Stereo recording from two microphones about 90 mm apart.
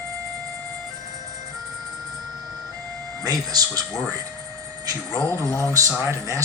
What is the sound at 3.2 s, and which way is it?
Speech, 45° right (ahead or behind).